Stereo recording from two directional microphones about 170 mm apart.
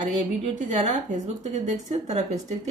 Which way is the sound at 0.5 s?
45° right (ahead or behind).